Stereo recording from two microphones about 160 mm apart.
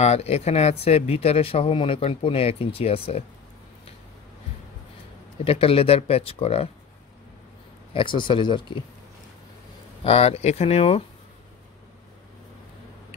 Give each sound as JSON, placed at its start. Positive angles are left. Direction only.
{"t": 0.0, "sound": "speech", "side_deg": 40}
{"t": 5.4, "sound": "speech", "side_deg": 35}
{"t": 7.9, "sound": "speech", "side_deg": 30}
{"t": 10.0, "sound": "speech", "side_deg": 40}